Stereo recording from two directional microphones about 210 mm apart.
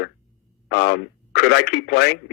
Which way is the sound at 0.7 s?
50° left (ahead or behind).